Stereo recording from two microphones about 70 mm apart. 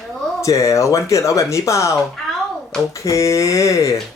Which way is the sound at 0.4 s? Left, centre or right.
Left.